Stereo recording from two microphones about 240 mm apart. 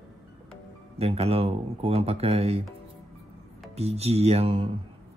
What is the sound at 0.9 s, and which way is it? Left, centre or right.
Speech, right.